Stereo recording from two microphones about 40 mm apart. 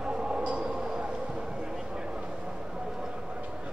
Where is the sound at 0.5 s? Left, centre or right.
Right.